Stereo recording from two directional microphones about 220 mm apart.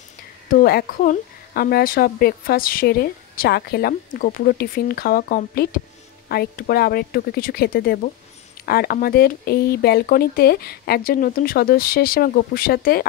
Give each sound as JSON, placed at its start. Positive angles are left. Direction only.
{"t": 0.5, "sound": "a woman's voice", "side_deg": 40}